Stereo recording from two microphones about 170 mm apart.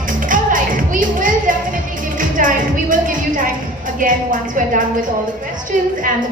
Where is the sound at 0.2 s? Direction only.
50° right (ahead or behind).